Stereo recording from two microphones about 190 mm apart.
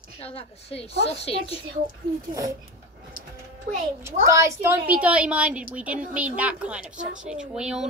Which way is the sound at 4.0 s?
15° right (ahead or behind).